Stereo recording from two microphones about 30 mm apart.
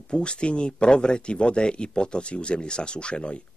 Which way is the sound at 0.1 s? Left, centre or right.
Left.